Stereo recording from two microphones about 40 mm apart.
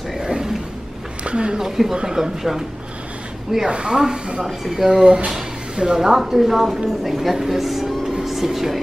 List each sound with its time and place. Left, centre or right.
0.2 s a sound: centre
1.2 s a woman's voice: right
1.6 s a woman's voice: centre
3.6 s a woman's voice: right
4.9 s a woman's voice: right; by 7.9 s centre
8.1 s music: centre